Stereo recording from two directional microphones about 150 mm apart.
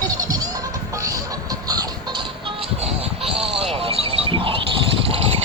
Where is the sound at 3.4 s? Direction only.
5° right (ahead or behind).